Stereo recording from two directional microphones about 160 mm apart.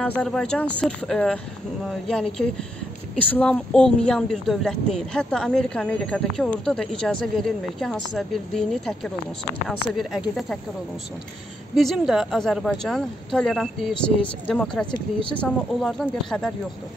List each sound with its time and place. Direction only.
0.0 s a woman's voice: 5° left (ahead or behind)
11.7 s a woman's voice: centre (ahead or behind)
14.9 s a woman's voice: 30° left (ahead or behind)
15.3 s a woman's voice: 5° left (ahead or behind)